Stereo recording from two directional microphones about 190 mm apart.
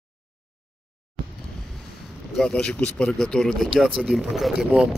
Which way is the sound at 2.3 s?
5° left (ahead or behind).